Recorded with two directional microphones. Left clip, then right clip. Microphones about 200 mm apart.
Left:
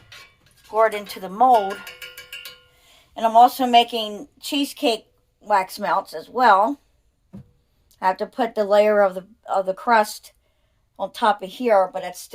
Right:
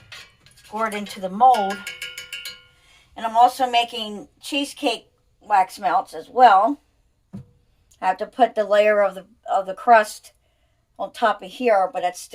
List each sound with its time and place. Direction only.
0.7 s speech: 35° left (ahead or behind)
3.2 s a woman's voice: 45° left (ahead or behind)
7.9 s speech: 30° left (ahead or behind)